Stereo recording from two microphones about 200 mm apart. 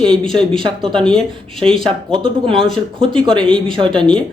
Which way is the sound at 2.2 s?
25° right (ahead or behind).